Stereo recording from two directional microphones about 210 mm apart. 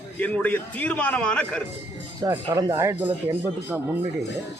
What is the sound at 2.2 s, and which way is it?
Speech, 15° right (ahead or behind).